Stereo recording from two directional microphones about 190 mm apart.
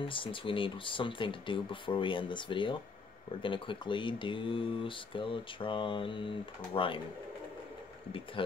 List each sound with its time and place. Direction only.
0.0 s speech: 25° left (ahead or behind)